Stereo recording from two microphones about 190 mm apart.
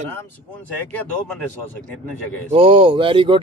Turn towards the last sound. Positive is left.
turn(degrees=-25)  # may be behind; listen again after turning